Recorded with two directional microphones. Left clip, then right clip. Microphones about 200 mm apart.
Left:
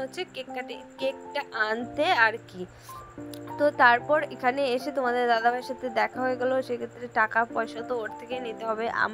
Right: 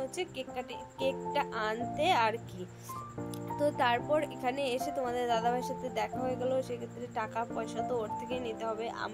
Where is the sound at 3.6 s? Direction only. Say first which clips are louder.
Left 9 dB; 10° left (ahead or behind).